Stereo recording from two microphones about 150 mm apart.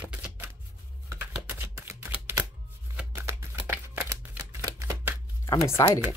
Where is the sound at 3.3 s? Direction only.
20° right (ahead or behind).